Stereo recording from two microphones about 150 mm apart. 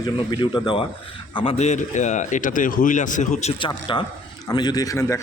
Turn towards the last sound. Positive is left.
turn(degrees=20)  # may be behind; listen again after turning